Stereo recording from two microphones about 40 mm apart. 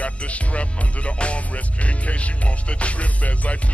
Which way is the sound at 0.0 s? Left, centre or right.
Left.